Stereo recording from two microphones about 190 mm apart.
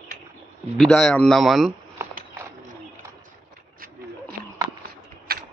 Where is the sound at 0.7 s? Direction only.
Centre (ahead or behind).